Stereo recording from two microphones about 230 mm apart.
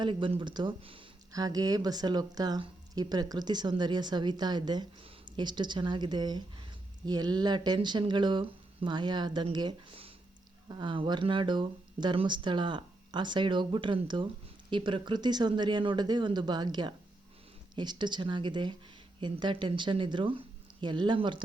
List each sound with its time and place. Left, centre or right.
0.0 s speech: right